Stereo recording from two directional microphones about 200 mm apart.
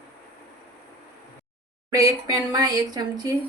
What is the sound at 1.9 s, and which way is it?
A woman's voice, 20° right (ahead or behind).